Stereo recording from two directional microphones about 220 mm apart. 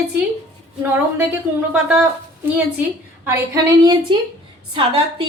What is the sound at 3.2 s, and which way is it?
A woman's voice, 15° right (ahead or behind).